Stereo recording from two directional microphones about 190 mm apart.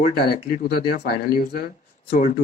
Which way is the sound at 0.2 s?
55° left (ahead or behind).